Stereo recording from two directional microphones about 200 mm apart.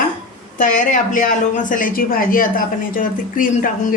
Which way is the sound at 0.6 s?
40° left (ahead or behind).